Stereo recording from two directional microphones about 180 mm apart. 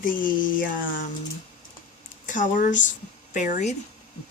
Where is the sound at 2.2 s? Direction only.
45° left (ahead or behind).